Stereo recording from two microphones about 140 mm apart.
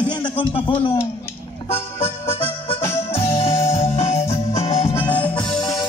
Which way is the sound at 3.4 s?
25° left (ahead or behind).